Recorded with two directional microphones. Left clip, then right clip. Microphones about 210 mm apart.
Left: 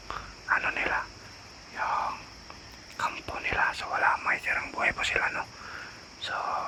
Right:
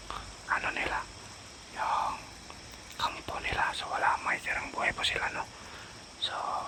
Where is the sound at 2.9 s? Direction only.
Centre (ahead or behind).